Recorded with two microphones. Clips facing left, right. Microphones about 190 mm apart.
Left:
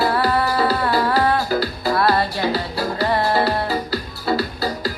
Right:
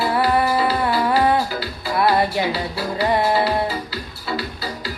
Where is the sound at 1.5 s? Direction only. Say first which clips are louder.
Left 6 dB; 40° left (ahead or behind).